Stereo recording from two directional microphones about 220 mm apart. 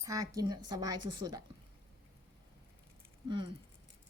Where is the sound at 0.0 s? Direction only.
15° right (ahead or behind).